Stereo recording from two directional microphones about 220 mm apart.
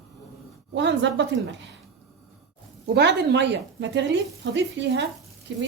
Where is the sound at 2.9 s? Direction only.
50° right (ahead or behind).